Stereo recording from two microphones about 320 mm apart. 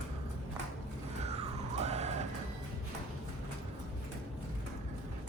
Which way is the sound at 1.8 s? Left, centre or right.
Right.